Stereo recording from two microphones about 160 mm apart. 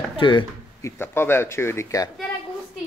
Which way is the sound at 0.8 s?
15° left (ahead or behind).